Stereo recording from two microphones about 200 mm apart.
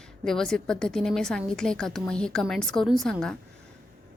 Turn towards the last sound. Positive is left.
turn(degrees=5)  # may be behind; listen again after turning